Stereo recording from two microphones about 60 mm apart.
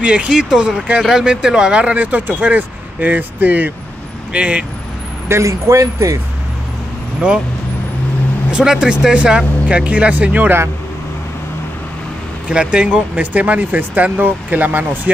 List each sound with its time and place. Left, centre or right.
0.0 s speech: centre
4.3 s speech: centre
5.3 s speech: right
8.5 s speech: centre
12.4 s speech: centre